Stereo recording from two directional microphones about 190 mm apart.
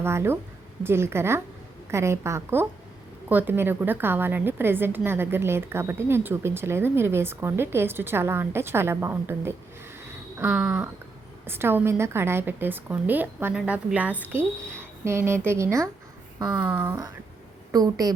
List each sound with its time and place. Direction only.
0.0 s a woman's voice: 15° right (ahead or behind)
10.0 s a sound: 10° right (ahead or behind)
11.4 s a woman's voice: 10° right (ahead or behind)